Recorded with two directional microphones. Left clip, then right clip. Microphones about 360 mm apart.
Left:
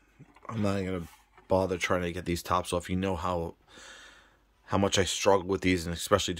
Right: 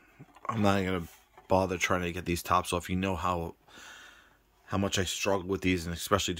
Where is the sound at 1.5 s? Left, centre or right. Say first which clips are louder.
Even; centre.